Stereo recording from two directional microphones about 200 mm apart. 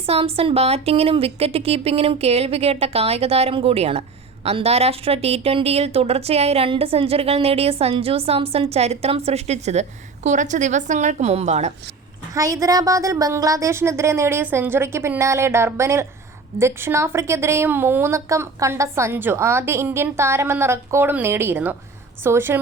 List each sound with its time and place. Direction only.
0.0 s a woman's voice: 30° right (ahead or behind)
12.3 s a woman's voice: 15° right (ahead or behind)